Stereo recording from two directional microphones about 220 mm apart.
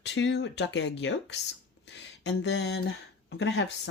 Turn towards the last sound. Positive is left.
turn(degrees=55)  # may be behind; listen again after turning